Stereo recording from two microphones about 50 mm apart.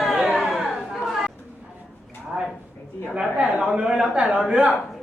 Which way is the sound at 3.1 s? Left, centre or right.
Right.